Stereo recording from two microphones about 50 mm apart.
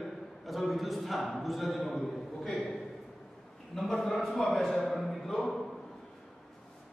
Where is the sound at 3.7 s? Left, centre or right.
Centre.